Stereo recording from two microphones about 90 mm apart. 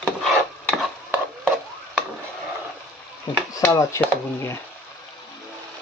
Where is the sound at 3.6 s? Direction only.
35° left (ahead or behind).